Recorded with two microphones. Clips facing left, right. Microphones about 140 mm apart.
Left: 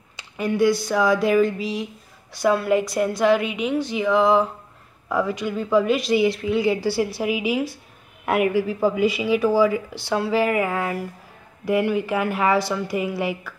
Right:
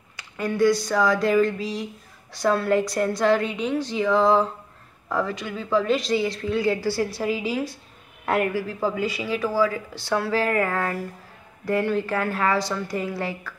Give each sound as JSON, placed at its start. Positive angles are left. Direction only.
{"t": 0.4, "sound": "a woman's voice", "side_deg": 10}